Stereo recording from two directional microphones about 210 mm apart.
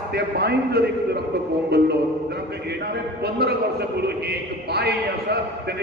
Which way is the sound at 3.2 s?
50° right (ahead or behind).